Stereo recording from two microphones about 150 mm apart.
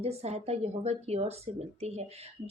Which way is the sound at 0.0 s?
45° right (ahead or behind).